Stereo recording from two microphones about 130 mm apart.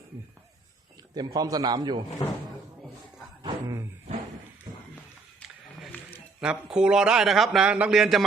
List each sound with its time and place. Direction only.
1.1 s a man's voice: 30° right (ahead or behind)
2.2 s speech: 40° left (ahead or behind)
6.4 s a man's voice: 5° right (ahead or behind)